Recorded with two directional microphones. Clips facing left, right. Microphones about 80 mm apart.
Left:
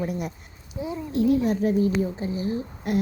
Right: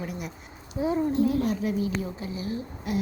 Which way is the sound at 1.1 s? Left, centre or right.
Left.